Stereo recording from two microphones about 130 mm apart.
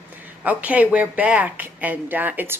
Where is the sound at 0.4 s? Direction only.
10° right (ahead or behind).